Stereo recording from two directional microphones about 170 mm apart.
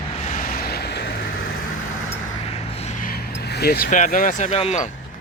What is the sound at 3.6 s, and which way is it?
Speech, 65° left (ahead or behind).